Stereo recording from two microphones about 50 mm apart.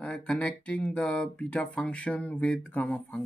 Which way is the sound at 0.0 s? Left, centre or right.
Left.